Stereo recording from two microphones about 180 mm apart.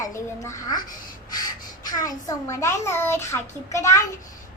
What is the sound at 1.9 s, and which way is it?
A child's voice, 20° left (ahead or behind).